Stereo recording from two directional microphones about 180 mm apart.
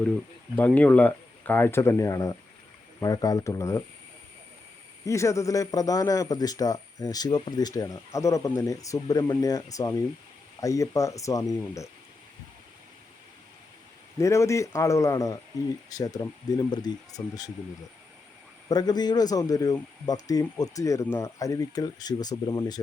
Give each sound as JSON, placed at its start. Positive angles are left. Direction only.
{"t": 0.5, "sound": "a man's voice", "side_deg": 10}
{"t": 5.0, "sound": "a man's voice", "side_deg": 15}
{"t": 14.2, "sound": "a man's voice", "side_deg": 15}
{"t": 18.7, "sound": "a man's voice", "side_deg": 20}